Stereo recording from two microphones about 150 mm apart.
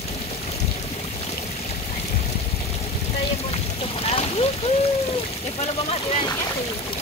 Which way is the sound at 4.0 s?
40° left (ahead or behind).